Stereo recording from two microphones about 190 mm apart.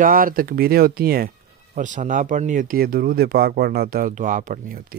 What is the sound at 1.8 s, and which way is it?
Speech, 40° right (ahead or behind).